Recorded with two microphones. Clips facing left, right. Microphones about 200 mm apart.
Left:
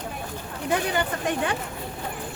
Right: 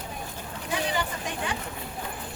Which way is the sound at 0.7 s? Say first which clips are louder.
Left 4 dB; 60° left (ahead or behind).